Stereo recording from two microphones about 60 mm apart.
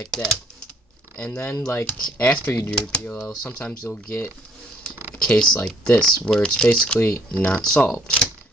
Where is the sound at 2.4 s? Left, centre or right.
Left.